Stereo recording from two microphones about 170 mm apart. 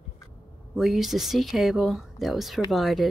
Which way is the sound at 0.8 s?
Centre (ahead or behind).